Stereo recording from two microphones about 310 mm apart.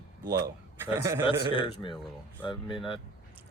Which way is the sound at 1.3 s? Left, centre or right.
Centre.